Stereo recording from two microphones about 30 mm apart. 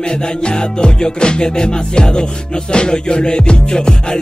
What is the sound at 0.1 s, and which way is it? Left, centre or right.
Music, left.